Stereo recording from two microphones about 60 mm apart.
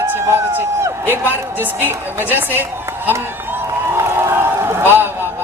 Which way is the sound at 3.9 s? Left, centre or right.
Right.